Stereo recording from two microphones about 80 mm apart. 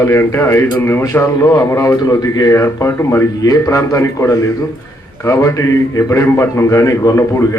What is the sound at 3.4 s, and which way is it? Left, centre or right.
Speech, left.